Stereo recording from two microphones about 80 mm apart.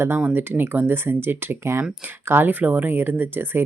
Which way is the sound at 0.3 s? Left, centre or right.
Right.